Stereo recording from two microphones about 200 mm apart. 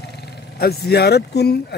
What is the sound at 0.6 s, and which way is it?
Speech, 50° left (ahead or behind).